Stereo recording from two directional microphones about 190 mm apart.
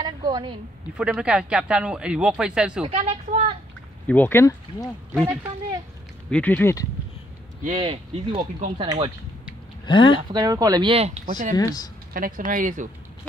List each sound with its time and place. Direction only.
0.0 s a sound: 20° right (ahead or behind)
0.9 s speech: 5° right (ahead or behind)
2.8 s a sound: 35° right (ahead or behind)
4.1 s speech: 10° left (ahead or behind)
4.8 s speech: centre (ahead or behind)
7.7 s speech: 25° right (ahead or behind)
9.8 s speech: 25° left (ahead or behind)
10.3 s speech: 20° right (ahead or behind); by 11.5 s 40° right (ahead or behind)
11.5 s speech: 20° left (ahead or behind)
12.1 s speech: 45° right (ahead or behind)